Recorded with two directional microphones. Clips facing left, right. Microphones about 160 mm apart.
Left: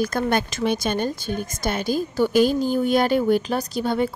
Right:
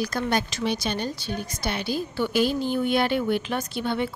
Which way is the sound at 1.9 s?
45° left (ahead or behind).